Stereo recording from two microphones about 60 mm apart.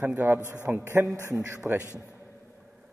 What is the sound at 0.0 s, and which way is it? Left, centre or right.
A man's voice, right.